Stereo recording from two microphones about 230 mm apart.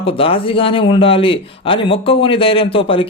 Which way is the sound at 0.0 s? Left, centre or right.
Left.